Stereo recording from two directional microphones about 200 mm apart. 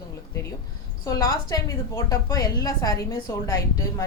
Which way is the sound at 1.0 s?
20° left (ahead or behind).